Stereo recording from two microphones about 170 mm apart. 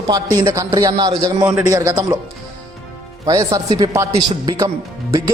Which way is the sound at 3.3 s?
20° right (ahead or behind).